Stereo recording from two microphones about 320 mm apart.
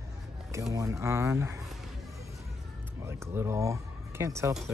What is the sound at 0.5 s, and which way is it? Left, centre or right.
Speech, centre.